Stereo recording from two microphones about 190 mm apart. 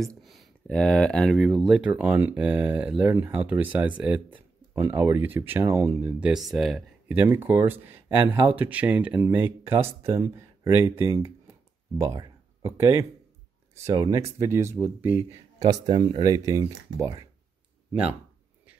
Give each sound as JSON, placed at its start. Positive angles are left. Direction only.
{"t": 0.2, "sound": "speech", "side_deg": 0}